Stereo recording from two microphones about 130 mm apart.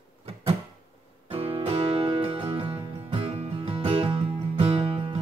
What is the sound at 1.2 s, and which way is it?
Music, 45° right (ahead or behind).